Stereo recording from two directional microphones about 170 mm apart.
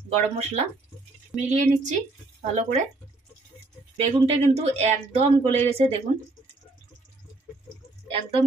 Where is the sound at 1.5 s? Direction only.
45° right (ahead or behind).